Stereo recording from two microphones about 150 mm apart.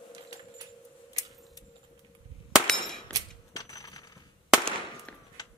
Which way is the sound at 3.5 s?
25° left (ahead or behind).